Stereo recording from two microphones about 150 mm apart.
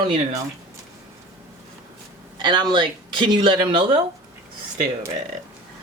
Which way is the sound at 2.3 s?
30° right (ahead or behind).